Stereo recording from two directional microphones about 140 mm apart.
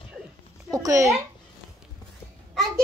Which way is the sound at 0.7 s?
25° right (ahead or behind).